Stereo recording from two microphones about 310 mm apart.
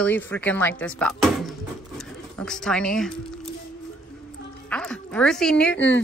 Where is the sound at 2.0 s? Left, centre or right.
Centre.